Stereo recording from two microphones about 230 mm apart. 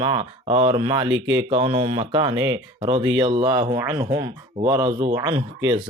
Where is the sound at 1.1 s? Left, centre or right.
Right.